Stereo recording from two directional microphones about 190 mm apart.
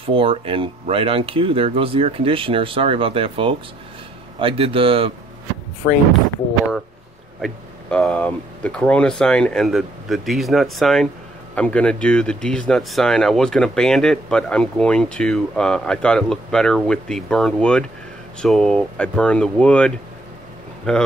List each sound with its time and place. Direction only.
0.0 s speech: 30° right (ahead or behind)
5.8 s speech: 15° left (ahead or behind)
7.4 s speech: 5° left (ahead or behind)